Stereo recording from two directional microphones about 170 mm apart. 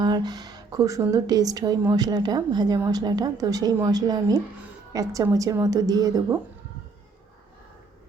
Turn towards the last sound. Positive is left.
turn(degrees=-20)  # may be behind; listen again after turning